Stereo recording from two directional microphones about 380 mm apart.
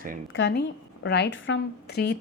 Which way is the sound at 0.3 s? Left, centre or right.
Left.